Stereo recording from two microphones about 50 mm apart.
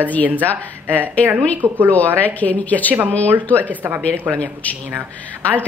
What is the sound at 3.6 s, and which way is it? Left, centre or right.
Speech, right.